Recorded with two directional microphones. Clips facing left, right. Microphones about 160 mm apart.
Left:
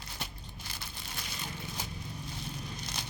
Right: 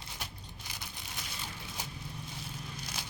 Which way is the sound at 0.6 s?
15° right (ahead or behind).